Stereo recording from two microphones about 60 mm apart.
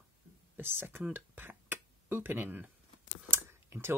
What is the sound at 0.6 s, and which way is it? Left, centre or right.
Speech, right.